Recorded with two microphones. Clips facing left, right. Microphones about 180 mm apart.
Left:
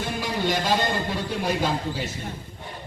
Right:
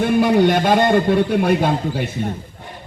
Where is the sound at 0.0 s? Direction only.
60° right (ahead or behind).